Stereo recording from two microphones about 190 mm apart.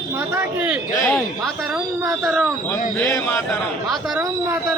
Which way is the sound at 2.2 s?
Centre (ahead or behind).